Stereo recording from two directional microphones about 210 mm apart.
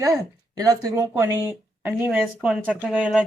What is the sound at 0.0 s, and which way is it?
Speech, 15° right (ahead or behind).